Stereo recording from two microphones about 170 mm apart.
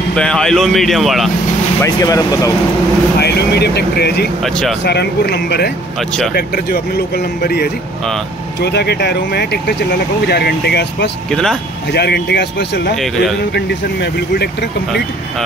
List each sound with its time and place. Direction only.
0.1 s speech: 5° left (ahead or behind)
1.8 s speech: 20° left (ahead or behind)
3.2 s speech: 75° left (ahead or behind)
4.4 s speech: centre (ahead or behind)
4.8 s speech: 75° left (ahead or behind)
5.9 s speech: centre (ahead or behind)
6.3 s speech: 70° left (ahead or behind)
11.2 s speech: centre (ahead or behind)
11.9 s speech: 75° left (ahead or behind)
12.9 s speech: centre (ahead or behind)
13.5 s speech: 80° left